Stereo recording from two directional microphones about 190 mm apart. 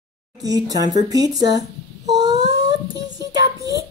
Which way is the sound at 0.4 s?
20° right (ahead or behind).